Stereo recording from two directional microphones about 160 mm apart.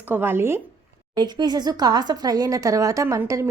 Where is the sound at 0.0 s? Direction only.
15° right (ahead or behind).